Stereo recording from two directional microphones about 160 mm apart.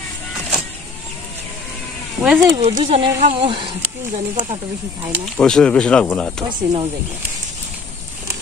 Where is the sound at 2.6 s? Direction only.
40° right (ahead or behind).